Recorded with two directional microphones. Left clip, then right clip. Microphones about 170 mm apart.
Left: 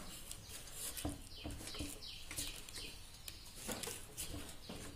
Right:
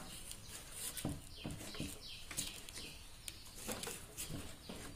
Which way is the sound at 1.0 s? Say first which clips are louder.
Even; centre (ahead or behind).